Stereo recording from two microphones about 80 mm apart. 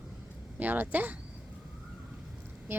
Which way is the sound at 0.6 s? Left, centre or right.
Right.